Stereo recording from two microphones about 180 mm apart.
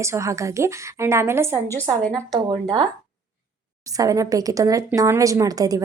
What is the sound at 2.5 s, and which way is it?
Speech, 25° right (ahead or behind).